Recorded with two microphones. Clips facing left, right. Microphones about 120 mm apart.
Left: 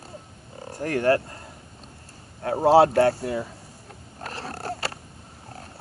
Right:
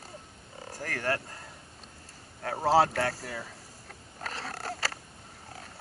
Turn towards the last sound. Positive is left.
turn(degrees=30)  # may be behind; listen again after turning